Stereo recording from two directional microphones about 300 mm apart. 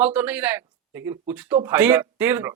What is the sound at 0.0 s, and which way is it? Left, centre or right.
Speech, centre.